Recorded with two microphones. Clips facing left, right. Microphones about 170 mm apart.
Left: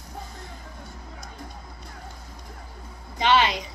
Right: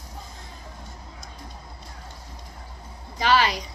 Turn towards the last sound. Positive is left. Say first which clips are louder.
# even
turn(degrees=20)  # may be behind; listen again after turning